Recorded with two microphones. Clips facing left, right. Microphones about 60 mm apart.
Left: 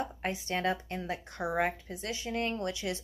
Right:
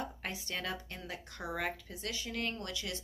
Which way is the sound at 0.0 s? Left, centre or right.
Left.